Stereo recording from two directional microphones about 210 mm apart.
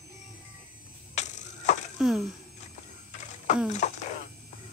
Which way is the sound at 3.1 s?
35° left (ahead or behind).